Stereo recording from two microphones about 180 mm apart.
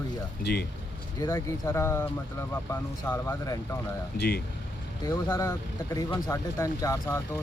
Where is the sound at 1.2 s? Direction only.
15° left (ahead or behind).